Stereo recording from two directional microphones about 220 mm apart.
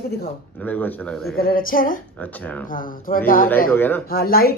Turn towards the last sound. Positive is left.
turn(degrees=45)  # may be behind; listen again after turning